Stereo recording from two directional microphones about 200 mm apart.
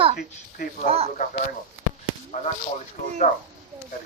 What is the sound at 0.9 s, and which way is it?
Speech, 30° right (ahead or behind).